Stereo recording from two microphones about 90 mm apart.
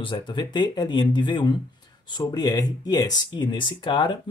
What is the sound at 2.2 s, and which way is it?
Speech, 45° left (ahead or behind).